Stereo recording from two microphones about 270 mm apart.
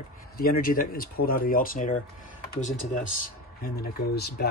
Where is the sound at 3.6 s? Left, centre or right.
Left.